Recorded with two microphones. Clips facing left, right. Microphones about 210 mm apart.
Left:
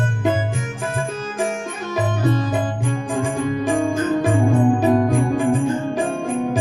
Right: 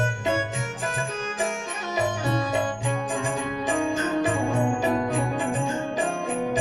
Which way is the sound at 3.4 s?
50° left (ahead or behind).